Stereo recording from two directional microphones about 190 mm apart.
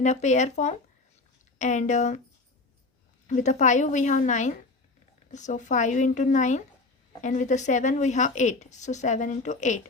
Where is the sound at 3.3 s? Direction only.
40° left (ahead or behind).